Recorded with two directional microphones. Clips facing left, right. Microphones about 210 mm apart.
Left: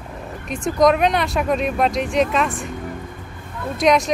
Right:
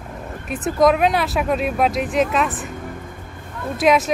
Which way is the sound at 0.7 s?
5° right (ahead or behind).